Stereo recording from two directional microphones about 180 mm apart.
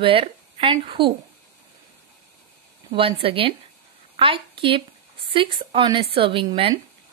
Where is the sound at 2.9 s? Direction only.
30° right (ahead or behind).